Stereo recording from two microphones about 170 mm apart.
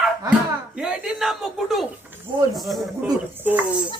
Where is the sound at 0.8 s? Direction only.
5° right (ahead or behind).